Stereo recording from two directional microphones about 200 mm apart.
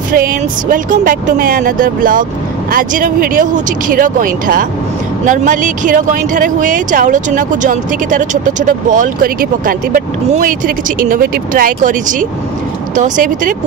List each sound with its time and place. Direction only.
0.1 s speech: 45° right (ahead or behind)